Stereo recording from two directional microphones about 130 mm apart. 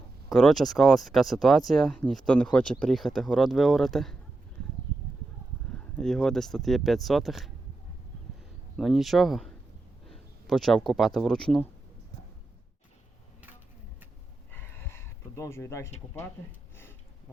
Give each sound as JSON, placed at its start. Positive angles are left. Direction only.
{"t": 0.3, "sound": "speech", "side_deg": 5}
{"t": 6.0, "sound": "speech", "side_deg": 5}
{"t": 8.7, "sound": "speech", "side_deg": 0}
{"t": 14.5, "sound": "a sound", "side_deg": 20}